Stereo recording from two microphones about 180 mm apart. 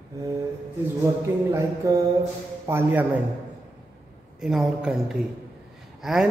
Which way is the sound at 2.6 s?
10° right (ahead or behind).